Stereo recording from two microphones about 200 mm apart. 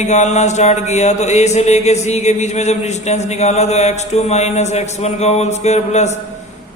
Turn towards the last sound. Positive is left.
turn(degrees=35)  # may be behind; listen again after turning